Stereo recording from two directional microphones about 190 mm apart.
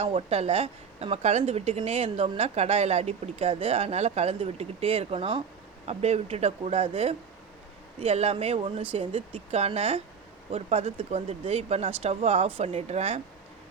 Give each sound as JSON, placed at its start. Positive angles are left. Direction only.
{"t": 0.0, "sound": "speech", "side_deg": -35}